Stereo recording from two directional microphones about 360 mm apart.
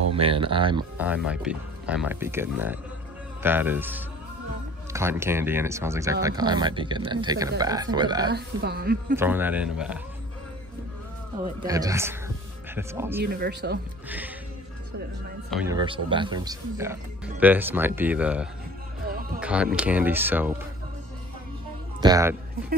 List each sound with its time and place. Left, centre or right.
0.1 s speech: centre
8.3 s a woman's voice: right
9.1 s speech: centre
11.4 s speech: centre
13.2 s a woman's voice: right
14.0 s music: centre
15.5 s speech: centre
19.0 s music: right
19.4 s speech: centre
22.0 s speech: centre